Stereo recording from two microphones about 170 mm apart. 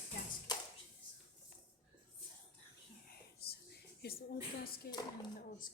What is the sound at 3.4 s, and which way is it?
Whispering, 70° left (ahead or behind).